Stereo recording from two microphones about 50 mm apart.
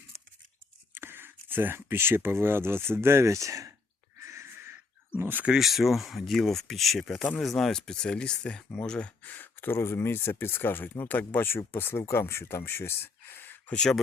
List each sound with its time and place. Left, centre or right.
0.9 s speech: right
4.2 s a sound: right
5.2 s speech: right
5.5 s speech: centre; by 9.3 s left
9.3 s speech: left
11.1 s speech: left
11.4 s speech: left